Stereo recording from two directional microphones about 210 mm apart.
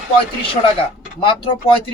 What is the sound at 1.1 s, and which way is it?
Speech, 25° left (ahead or behind).